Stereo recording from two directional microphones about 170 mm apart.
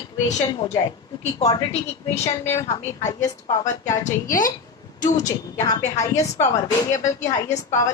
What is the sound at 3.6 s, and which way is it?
A woman's voice, 45° left (ahead or behind).